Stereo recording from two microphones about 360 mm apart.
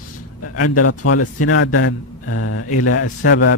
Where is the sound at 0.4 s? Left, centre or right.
Left.